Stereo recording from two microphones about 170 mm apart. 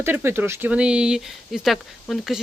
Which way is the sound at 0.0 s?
15° right (ahead or behind).